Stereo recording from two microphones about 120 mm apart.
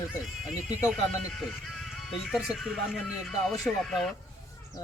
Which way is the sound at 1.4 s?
Centre (ahead or behind).